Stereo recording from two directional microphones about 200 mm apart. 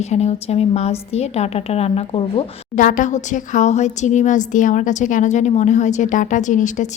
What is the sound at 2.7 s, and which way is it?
A woman's voice, 40° left (ahead or behind).